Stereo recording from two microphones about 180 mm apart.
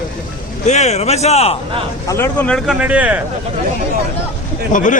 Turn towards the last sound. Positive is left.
turn(degrees=45)  # may be behind; listen again after turning